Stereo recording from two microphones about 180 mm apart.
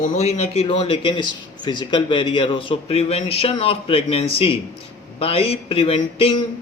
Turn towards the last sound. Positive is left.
turn(degrees=30)  # may be behind; listen again after turning